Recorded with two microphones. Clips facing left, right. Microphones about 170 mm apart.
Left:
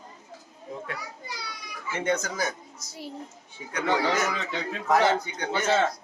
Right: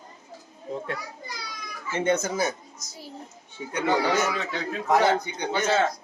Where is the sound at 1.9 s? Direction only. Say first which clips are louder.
Right 3 dB; 25° right (ahead or behind).